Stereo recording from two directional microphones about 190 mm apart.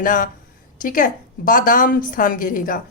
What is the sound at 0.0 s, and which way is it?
A woman's voice, 45° left (ahead or behind).